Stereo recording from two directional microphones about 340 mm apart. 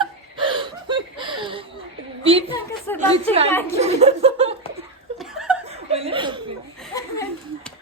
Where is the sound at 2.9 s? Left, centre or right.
Centre.